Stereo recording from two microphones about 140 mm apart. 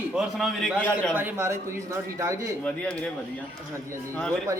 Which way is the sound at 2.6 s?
10° left (ahead or behind).